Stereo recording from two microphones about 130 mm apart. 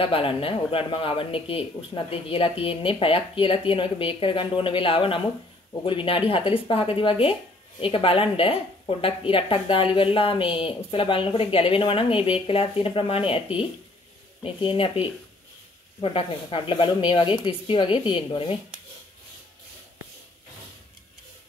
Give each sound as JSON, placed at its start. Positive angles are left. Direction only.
{"t": 0.0, "sound": "speech", "side_deg": 45}
{"t": 14.4, "sound": "speech", "side_deg": 40}